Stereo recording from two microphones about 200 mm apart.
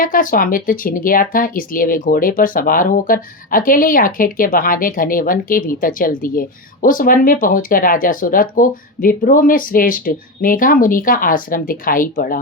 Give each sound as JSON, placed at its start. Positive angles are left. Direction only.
{"t": 0.0, "sound": "speech", "side_deg": 45}